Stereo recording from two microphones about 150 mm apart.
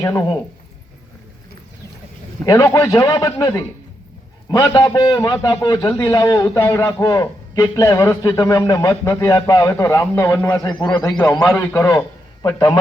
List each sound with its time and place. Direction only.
0.0 s a man's voice: 20° left (ahead or behind)
2.4 s a man's voice: 20° left (ahead or behind)
10.7 s a man's voice: 30° left (ahead or behind)
11.4 s a man's voice: 15° left (ahead or behind)